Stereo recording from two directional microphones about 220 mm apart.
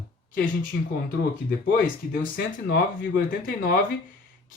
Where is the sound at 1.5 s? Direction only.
45° left (ahead or behind).